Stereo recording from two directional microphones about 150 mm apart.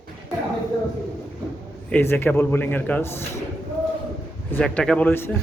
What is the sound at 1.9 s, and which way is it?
Speech, 15° left (ahead or behind).